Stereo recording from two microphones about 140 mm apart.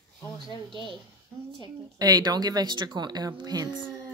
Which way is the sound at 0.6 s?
35° right (ahead or behind).